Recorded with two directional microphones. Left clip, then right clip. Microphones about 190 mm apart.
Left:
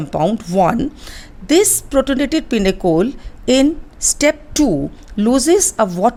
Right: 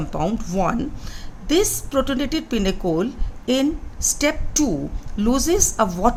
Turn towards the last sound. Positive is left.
turn(degrees=40)  # may be behind; listen again after turning